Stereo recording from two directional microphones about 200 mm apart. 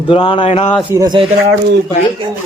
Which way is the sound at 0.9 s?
20° right (ahead or behind).